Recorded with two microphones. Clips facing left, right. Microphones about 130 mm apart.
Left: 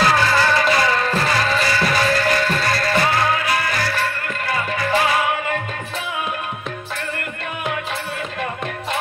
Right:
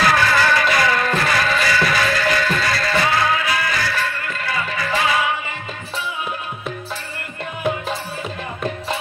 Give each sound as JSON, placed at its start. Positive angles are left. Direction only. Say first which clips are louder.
{"t": 0.1, "sound": "music", "louder": "even", "side_deg": 30}